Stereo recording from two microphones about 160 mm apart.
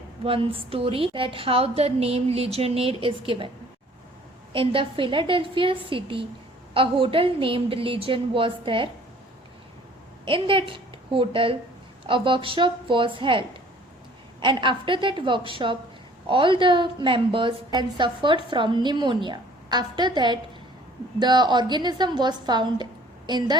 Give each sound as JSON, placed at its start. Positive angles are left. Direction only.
{"t": 0.3, "sound": "a woman's voice", "side_deg": -35}
{"t": 4.5, "sound": "a woman's voice", "side_deg": -35}
{"t": 10.2, "sound": "a woman's voice", "side_deg": -35}
{"t": 14.4, "sound": "a woman's voice", "side_deg": -30}